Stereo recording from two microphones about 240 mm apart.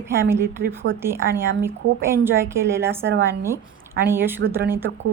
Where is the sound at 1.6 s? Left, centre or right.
Centre.